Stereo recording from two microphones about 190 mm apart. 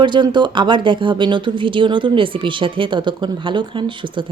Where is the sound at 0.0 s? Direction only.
25° right (ahead or behind).